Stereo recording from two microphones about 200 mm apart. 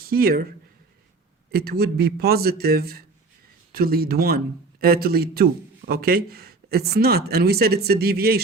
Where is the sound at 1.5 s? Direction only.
50° right (ahead or behind).